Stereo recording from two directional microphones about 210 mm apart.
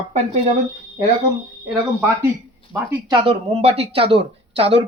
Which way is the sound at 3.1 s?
25° right (ahead or behind).